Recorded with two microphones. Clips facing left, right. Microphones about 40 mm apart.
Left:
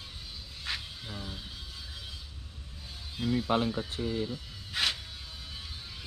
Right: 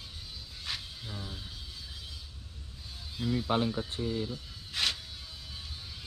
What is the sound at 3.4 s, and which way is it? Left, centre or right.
Speech, centre.